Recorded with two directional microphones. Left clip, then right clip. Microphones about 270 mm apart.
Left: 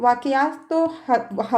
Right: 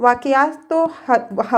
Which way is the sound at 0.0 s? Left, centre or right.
Centre.